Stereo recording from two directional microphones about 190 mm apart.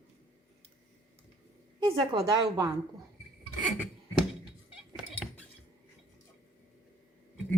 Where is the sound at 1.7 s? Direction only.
20° right (ahead or behind).